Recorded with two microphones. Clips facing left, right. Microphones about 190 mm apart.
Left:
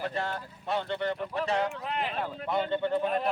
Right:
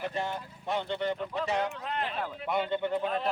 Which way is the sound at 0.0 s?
15° right (ahead or behind).